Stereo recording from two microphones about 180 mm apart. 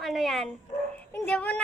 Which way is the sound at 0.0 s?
Centre (ahead or behind).